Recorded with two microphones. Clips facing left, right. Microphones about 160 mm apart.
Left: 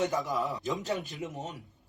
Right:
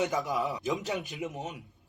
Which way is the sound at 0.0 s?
20° right (ahead or behind).